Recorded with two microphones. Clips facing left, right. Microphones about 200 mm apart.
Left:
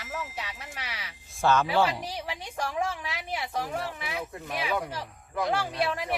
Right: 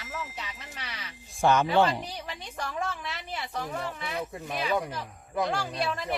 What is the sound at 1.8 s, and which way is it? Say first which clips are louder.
A woman's voice: right 1 dB; 10° left (ahead or behind).